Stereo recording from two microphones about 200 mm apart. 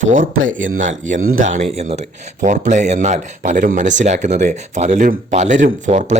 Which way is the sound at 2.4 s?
35° right (ahead or behind).